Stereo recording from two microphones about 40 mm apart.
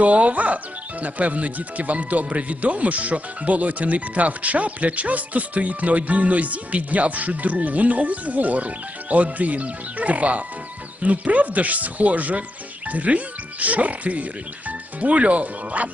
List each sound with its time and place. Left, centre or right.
0.0 s speech: right